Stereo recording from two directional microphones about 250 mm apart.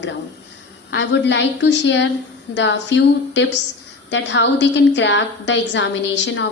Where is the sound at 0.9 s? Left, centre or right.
Left.